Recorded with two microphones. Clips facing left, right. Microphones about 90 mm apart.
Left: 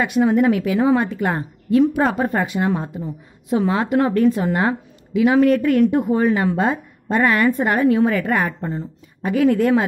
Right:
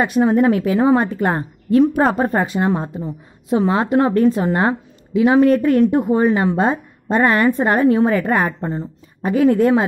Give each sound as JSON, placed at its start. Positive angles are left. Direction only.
{"t": 0.0, "sound": "a woman's voice", "side_deg": -35}